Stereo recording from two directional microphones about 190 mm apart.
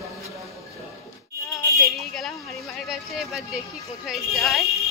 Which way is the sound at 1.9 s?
Centre (ahead or behind).